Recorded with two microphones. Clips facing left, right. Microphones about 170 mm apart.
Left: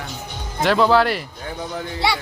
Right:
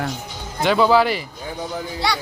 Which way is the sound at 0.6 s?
Centre (ahead or behind).